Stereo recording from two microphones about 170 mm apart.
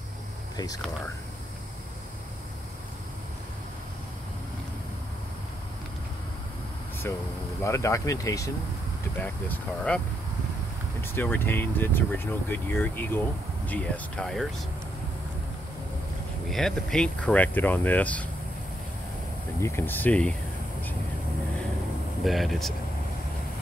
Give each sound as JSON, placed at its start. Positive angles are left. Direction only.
{"t": 7.0, "sound": "speech", "side_deg": 10}
{"t": 9.2, "sound": "speech", "side_deg": 10}
{"t": 16.4, "sound": "speech", "side_deg": 5}
{"t": 19.6, "sound": "speech", "side_deg": 15}
{"t": 22.2, "sound": "speech", "side_deg": 0}